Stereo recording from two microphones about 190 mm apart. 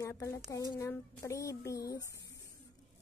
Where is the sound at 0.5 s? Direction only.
15° left (ahead or behind).